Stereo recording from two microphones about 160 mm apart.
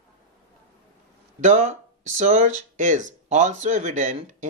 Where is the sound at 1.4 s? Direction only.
50° right (ahead or behind).